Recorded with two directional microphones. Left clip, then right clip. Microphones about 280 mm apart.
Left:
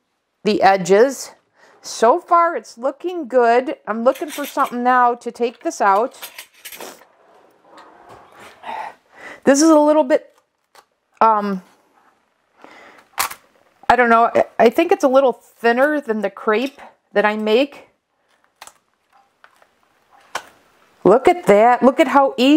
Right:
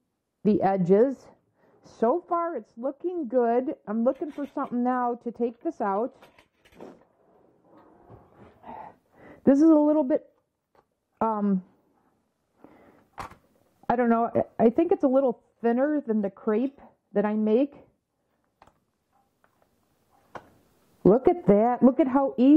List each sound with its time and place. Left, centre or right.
0.4 s a woman's voice: centre
7.2 s a sound: centre
10.7 s shuffling cards: centre
12.5 s camera: centre
15.6 s a woman's voice: centre
20.2 s tick-tock: centre
21.0 s a woman's voice: centre